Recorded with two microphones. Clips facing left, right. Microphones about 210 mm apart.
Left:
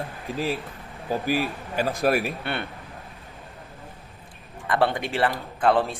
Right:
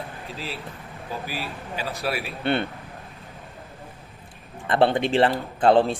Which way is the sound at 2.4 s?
25° right (ahead or behind).